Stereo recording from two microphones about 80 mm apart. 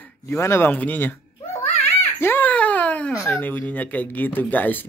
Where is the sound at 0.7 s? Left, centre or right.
Left.